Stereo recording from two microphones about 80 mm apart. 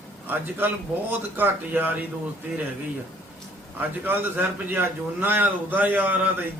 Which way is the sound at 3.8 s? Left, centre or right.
Right.